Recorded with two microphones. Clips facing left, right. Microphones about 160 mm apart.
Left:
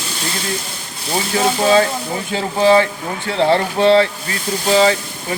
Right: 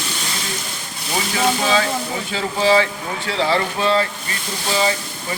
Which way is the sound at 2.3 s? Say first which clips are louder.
Left 4 dB; 55° left (ahead or behind).